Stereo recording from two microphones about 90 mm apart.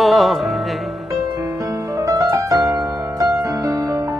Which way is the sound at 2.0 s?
40° right (ahead or behind).